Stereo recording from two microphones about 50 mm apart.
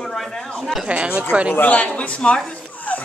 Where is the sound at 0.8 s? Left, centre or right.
Right.